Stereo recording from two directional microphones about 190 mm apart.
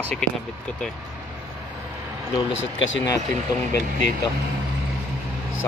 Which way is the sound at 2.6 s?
80° left.